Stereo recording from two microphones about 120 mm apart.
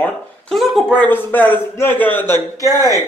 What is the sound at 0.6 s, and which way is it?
A man's voice, 10° left (ahead or behind).